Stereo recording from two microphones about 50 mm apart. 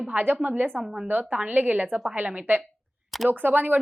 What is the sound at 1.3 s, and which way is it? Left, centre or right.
A woman's voice, right.